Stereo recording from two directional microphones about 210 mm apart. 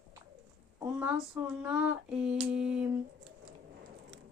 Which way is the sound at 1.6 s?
5° right (ahead or behind).